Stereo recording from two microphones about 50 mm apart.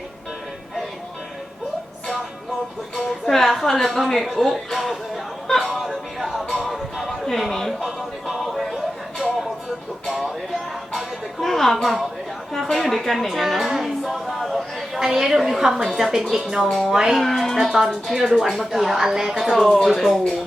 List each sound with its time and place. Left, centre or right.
2.9 s a woman's voice: centre
5.5 s speech: centre
5.8 s music: centre
7.1 s speech: centre
7.8 s music: centre
10.1 s speech: centre
10.9 s a woman's voice: centre
17.2 s a woman's voice: centre
19.5 s a woman's voice: centre